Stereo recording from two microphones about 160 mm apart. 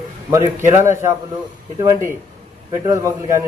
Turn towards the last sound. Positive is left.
turn(degrees=-20)  # may be behind; listen again after turning